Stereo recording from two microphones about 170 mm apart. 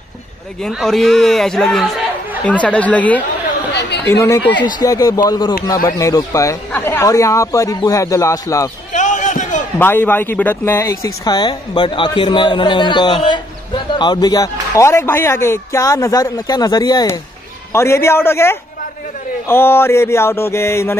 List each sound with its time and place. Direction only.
0.6 s a man's voice: centre (ahead or behind); by 8.6 s 15° left (ahead or behind)
8.9 s basketball bounce: 45° left (ahead or behind)
9.8 s a man's voice: 10° left (ahead or behind)